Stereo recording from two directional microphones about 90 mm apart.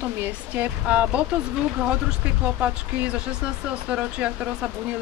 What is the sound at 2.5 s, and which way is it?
Speech, 15° right (ahead or behind).